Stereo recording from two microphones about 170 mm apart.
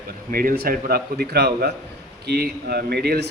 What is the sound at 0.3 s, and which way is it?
A man's voice, 55° right (ahead or behind).